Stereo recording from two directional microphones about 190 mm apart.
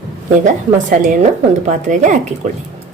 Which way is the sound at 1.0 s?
40° right (ahead or behind).